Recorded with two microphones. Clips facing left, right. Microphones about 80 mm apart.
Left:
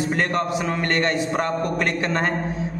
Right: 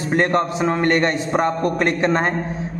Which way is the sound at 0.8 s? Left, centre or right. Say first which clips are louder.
Right 2 dB; right.